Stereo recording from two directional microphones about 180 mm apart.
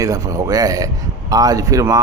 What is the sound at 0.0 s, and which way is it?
A man's voice, 20° right (ahead or behind).